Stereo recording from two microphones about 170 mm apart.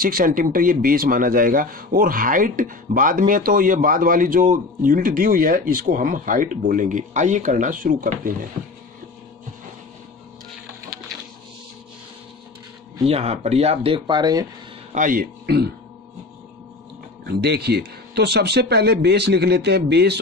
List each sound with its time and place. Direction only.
0.0 s speech: 55° right (ahead or behind)
13.0 s speech: 35° right (ahead or behind)
14.9 s a man's voice: 50° right (ahead or behind)
15.4 s speech: 75° right (ahead or behind)
17.3 s speech: 75° right (ahead or behind)